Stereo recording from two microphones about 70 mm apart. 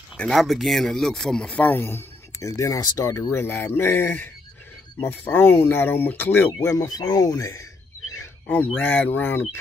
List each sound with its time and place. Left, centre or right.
0.3 s speech: centre
1.5 s speech: left
2.4 s speech: left
6.6 s speech: left
8.5 s speech: left